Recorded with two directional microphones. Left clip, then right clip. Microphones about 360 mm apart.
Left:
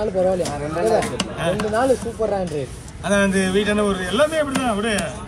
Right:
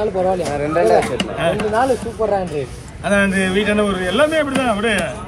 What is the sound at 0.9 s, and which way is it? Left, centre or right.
Speech, centre.